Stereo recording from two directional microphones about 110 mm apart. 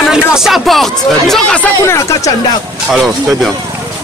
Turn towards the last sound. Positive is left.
turn(degrees=0)  # may be behind; listen again after turning